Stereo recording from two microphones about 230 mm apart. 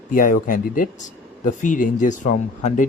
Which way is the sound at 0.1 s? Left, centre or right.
Left.